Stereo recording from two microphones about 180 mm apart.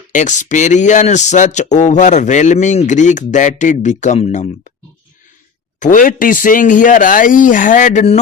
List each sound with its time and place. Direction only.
0.1 s speech: 45° left (ahead or behind)
5.8 s speech: 45° left (ahead or behind)